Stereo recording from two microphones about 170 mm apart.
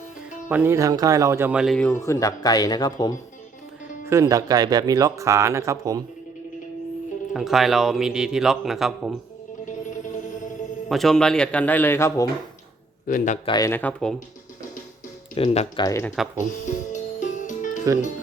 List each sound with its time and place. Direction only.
0.4 s speech: 10° right (ahead or behind)
1.9 s speech: 20° left (ahead or behind)
4.0 s speech: 15° right (ahead or behind)
7.3 s speech: centre (ahead or behind)
10.8 s speech: centre (ahead or behind); by 12.3 s 15° left (ahead or behind)
13.1 s a man's voice: 50° left (ahead or behind)
13.4 s speech: 25° left (ahead or behind)
13.7 s speech: 10° left (ahead or behind)
15.4 s speech: 35° left (ahead or behind)
15.8 s speech: 15° left (ahead or behind)
16.9 s music: 45° left (ahead or behind)